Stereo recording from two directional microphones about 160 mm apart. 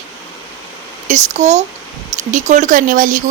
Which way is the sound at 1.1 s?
45° right (ahead or behind).